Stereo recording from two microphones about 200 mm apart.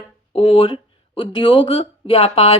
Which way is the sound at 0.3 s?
30° left (ahead or behind).